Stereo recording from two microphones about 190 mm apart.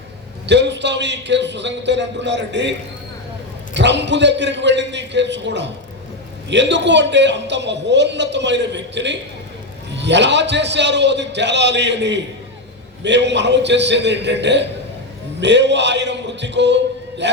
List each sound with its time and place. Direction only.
0.4 s a man's voice: 65° right (ahead or behind)
3.8 s a man's voice: 65° right (ahead or behind)